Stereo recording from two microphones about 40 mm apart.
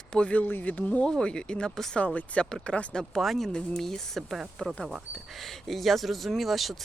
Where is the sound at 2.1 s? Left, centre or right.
Left.